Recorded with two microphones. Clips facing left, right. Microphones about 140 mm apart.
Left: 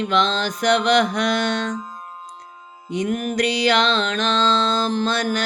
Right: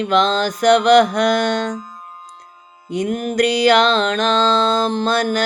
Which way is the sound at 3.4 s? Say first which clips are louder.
Right 6 dB; 50° right (ahead or behind).